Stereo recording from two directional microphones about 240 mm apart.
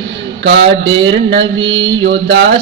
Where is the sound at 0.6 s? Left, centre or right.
Right.